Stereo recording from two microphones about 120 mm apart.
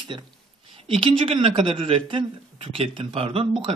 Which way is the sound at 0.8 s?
45° right (ahead or behind).